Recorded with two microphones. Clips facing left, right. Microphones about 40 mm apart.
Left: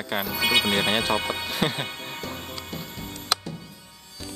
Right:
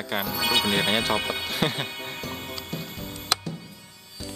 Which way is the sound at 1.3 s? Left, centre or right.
Centre.